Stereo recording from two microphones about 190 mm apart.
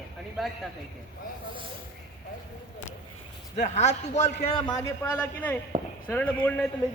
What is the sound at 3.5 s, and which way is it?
A man's voice, 40° left (ahead or behind).